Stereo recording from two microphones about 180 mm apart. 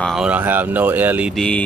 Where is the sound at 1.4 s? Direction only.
5° left (ahead or behind).